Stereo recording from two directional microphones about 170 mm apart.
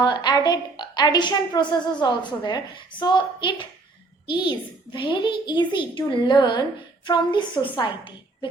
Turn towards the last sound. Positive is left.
turn(degrees=25)  # may be behind; listen again after turning